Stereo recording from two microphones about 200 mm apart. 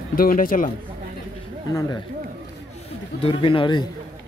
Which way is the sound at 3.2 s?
25° left (ahead or behind).